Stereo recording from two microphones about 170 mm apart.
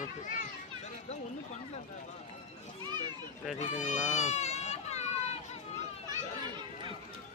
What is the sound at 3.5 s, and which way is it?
A child's voice, 45° left (ahead or behind).